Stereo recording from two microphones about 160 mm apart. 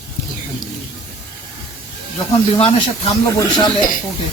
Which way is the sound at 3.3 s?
25° left (ahead or behind).